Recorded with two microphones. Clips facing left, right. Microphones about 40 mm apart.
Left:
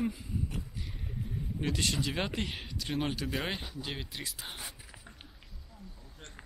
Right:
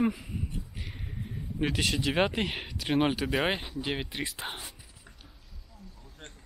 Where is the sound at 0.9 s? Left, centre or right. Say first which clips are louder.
Left 1 dB; right.